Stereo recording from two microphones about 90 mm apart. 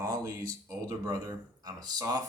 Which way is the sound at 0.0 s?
40° right (ahead or behind).